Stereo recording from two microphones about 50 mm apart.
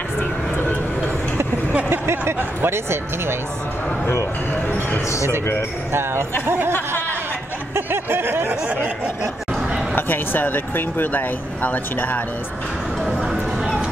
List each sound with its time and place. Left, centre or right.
0.2 s vehicle: left
1.9 s speech: right
4.0 s a man's voice: left
4.6 s speech: left
5.0 s speech: left
5.9 s speech: right
7.7 s a sound: right
9.9 s speech: left
13.2 s a sound: centre